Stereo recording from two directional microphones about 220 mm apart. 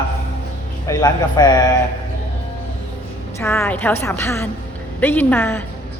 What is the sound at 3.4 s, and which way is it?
Speech, 10° left (ahead or behind).